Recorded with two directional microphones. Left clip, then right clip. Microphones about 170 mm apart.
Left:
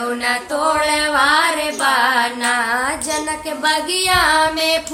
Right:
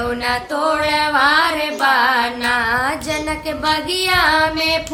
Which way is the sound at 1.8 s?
15° right (ahead or behind).